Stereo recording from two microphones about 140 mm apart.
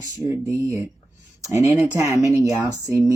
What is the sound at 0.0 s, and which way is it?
Speech, 20° right (ahead or behind).